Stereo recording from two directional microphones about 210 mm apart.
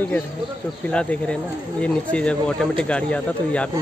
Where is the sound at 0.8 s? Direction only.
5° left (ahead or behind).